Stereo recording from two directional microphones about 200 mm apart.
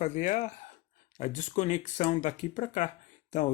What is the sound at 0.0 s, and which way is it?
Speech, 35° left (ahead or behind).